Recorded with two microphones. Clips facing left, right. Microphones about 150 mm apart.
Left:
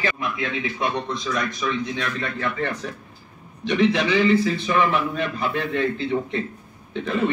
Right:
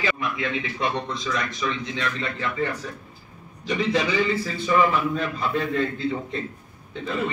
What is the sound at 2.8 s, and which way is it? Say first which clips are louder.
A man's voice: left 3 dB; 70° left (ahead or behind).